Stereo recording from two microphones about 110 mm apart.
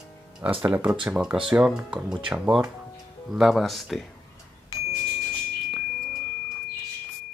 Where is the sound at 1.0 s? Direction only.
10° right (ahead or behind).